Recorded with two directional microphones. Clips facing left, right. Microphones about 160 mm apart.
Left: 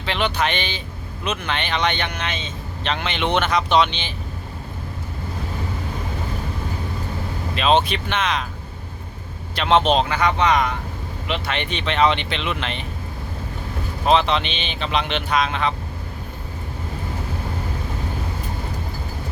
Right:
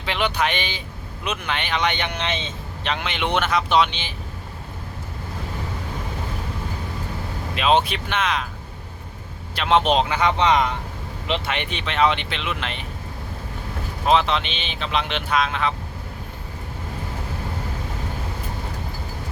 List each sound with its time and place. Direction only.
0.0 s speech: 10° right (ahead or behind)
2.8 s speech: 10° right (ahead or behind)
7.5 s speech: 10° right (ahead or behind)
9.6 s speech: 10° right (ahead or behind)
11.5 s speech: 10° right (ahead or behind)
14.1 s speech: centre (ahead or behind)